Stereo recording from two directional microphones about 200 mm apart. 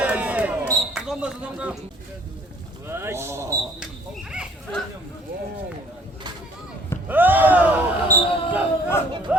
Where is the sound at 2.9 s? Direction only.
10° right (ahead or behind).